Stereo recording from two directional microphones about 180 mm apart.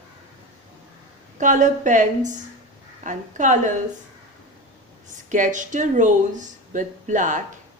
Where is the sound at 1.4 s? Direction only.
45° right (ahead or behind).